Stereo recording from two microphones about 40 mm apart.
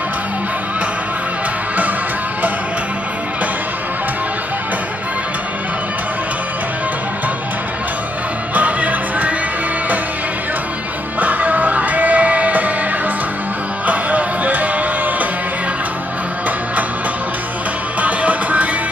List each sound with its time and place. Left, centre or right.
8.5 s music: right
11.1 s music: right
13.8 s music: right
18.0 s music: right